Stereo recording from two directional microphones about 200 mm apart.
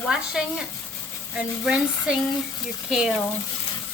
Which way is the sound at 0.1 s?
5° right (ahead or behind).